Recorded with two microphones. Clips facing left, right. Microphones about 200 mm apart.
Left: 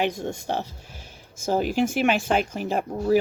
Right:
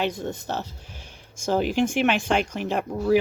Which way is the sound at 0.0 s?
15° left (ahead or behind).